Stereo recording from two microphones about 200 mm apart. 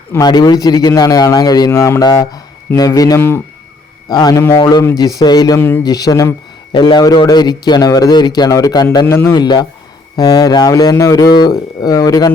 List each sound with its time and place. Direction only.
0.1 s a man's voice: 20° left (ahead or behind)